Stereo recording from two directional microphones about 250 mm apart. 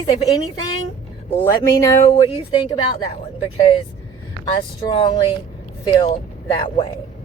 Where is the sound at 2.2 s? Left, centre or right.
Left.